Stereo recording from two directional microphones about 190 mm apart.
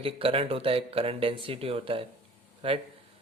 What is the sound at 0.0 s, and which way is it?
Speech, 30° right (ahead or behind).